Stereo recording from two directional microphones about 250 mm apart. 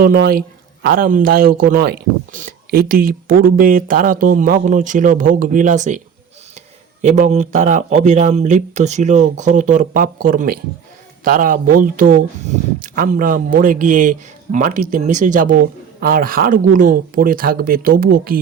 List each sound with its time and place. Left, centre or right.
0.0 s a man's voice: right
7.0 s a man's voice: right